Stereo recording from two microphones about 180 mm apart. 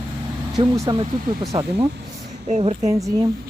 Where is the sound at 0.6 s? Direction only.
25° right (ahead or behind).